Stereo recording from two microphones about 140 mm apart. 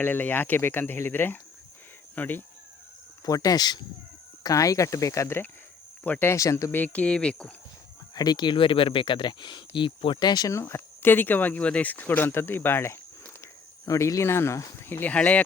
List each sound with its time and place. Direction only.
0.0 s speech: 15° left (ahead or behind)
3.2 s speech: 25° left (ahead or behind); by 7.5 s 5° left (ahead or behind)
8.1 s speech: 30° left (ahead or behind); by 15.4 s 10° left (ahead or behind)